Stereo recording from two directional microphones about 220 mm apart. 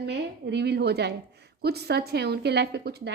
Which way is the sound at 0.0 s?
50° right (ahead or behind).